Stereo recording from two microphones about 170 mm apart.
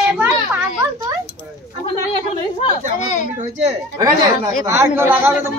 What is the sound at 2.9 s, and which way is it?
Speech, 45° left (ahead or behind).